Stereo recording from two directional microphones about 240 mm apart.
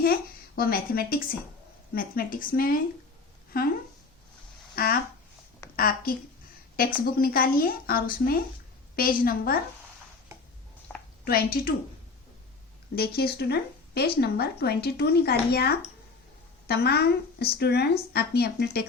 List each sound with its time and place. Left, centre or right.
0.0 s speech: left
4.7 s a woman's voice: left
11.6 s speech: left
13.0 s speech: left